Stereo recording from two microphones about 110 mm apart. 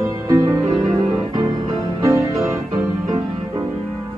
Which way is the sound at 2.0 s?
25° right (ahead or behind).